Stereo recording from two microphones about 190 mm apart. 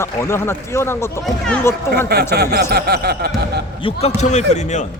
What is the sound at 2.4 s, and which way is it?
Speech, 55° right (ahead or behind).